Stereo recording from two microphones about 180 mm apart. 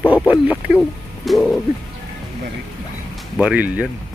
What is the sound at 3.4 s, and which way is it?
Speech, 10° right (ahead or behind).